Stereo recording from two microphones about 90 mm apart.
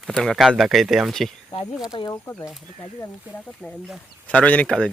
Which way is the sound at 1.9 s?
80° left.